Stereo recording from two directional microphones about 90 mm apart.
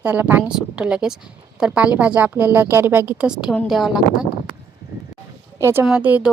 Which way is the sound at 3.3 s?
10° right (ahead or behind).